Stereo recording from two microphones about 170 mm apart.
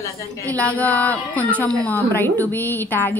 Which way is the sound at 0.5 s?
10° left (ahead or behind).